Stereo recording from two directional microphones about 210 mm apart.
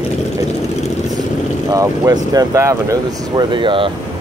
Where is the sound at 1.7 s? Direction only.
15° right (ahead or behind).